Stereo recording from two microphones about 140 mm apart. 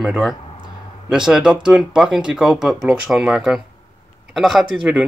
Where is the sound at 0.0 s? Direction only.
Centre (ahead or behind).